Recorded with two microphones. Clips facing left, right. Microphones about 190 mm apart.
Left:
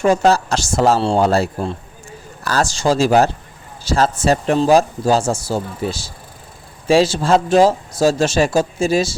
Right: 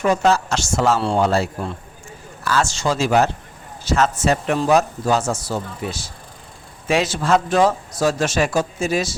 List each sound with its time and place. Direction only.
0.0 s speech: 30° left (ahead or behind)